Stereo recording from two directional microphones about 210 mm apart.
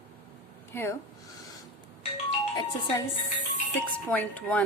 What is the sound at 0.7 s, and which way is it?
Speech, 10° left (ahead or behind).